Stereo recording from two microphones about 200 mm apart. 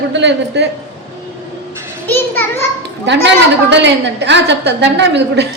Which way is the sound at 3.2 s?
60° right (ahead or behind).